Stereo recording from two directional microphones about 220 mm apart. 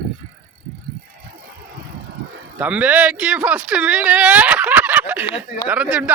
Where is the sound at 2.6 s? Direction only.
5° right (ahead or behind).